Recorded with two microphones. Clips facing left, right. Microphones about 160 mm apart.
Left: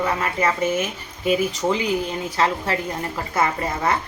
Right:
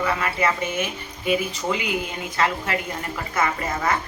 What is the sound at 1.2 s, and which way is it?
A woman's voice, 40° left (ahead or behind).